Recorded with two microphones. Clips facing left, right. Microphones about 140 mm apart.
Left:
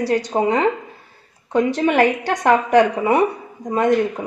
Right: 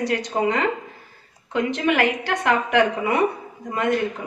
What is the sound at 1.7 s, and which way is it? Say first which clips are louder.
A woman's voice: left 2 dB; 40° left (ahead or behind).